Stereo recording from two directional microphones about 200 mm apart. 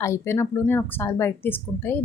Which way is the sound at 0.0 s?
15° left (ahead or behind).